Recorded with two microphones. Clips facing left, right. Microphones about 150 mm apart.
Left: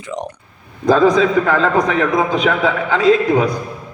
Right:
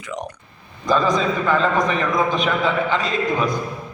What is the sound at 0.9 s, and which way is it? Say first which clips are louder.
A man's voice: left 6 dB; 90° left.